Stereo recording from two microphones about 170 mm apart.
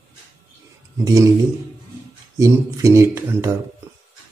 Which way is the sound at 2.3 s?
20° right (ahead or behind).